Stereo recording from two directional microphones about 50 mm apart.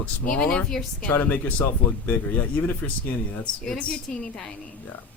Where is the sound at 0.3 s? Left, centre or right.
Centre.